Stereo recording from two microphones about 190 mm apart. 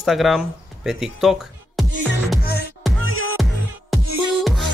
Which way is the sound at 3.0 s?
90° left.